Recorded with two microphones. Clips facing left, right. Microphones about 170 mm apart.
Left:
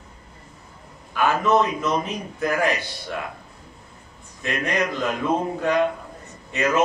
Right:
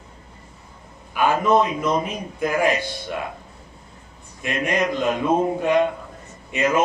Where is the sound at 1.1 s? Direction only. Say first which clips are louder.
Right 1 dB; 10° right (ahead or behind).